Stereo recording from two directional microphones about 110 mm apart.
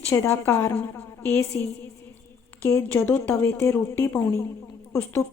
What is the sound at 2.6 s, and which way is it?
A woman's voice, 20° left (ahead or behind).